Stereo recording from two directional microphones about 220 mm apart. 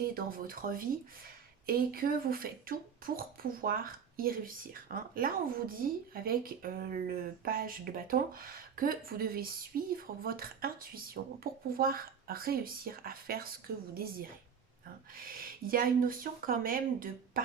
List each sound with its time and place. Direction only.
0.1 s speech: 40° right (ahead or behind)